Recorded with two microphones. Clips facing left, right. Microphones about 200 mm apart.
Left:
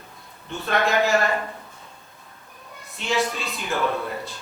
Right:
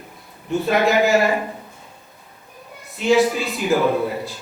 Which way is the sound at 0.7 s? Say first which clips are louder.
Right 4 dB; 5° right (ahead or behind).